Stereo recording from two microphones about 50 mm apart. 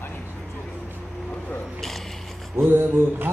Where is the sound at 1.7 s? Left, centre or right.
Centre.